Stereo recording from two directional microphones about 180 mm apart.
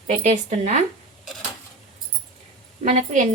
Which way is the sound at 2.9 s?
40° right (ahead or behind).